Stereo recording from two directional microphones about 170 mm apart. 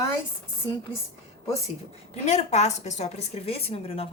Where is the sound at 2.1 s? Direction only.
40° left (ahead or behind).